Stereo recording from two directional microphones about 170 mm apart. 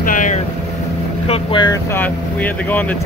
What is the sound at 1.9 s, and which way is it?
Speech, 10° left (ahead or behind).